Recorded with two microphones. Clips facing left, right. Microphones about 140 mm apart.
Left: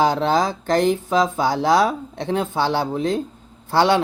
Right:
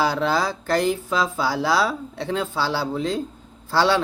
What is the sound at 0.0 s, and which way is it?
Speech, 20° left (ahead or behind).